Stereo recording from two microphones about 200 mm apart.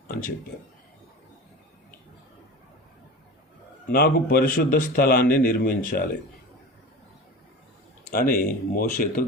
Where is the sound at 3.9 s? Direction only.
50° left (ahead or behind).